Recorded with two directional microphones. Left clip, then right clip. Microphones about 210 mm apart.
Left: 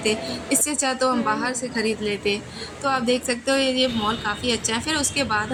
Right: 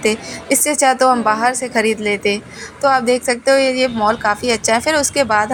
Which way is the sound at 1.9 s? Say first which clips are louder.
Right 7 dB; 75° right (ahead or behind).